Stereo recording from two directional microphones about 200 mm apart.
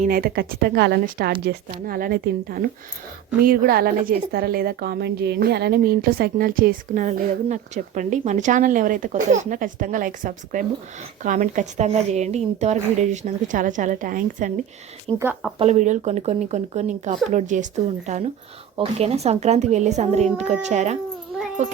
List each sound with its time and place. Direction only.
0.0 s a woman's voice: 45° right (ahead or behind)
15.1 s a woman's voice: 25° right (ahead or behind)